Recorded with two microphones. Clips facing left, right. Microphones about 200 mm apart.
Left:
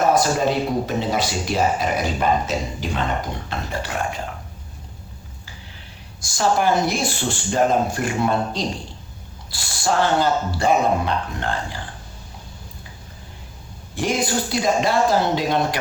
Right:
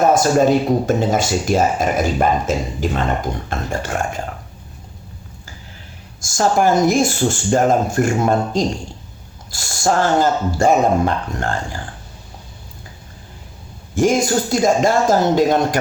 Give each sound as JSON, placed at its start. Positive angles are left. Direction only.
{"t": 0.1, "sound": "speech", "side_deg": -45}
{"t": 6.2, "sound": "speech", "side_deg": -45}
{"t": 13.9, "sound": "speech", "side_deg": -45}